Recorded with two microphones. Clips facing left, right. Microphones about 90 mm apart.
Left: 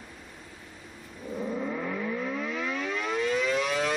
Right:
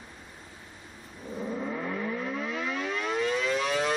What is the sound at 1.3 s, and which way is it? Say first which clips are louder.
Civil defense siren: left 1 dB; 5° left (ahead or behind).